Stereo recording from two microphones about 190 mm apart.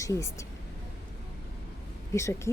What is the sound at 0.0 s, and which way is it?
Speech, 15° left (ahead or behind).